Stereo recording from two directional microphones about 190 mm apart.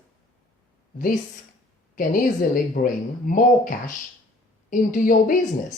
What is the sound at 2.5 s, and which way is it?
Speech, 45° left (ahead or behind).